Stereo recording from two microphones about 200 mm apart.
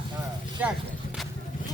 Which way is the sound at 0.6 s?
10° right (ahead or behind).